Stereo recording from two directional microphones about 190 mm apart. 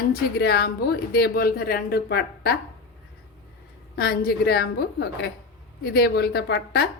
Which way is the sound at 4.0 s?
55° left (ahead or behind).